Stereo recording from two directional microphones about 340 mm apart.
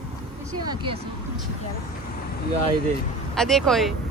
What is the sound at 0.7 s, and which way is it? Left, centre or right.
Speech, centre.